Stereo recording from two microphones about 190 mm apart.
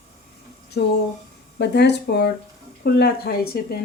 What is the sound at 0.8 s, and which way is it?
Speech, 60° left (ahead or behind).